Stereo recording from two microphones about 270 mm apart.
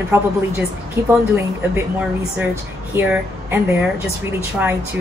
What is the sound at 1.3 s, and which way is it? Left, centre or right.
A woman's voice, centre.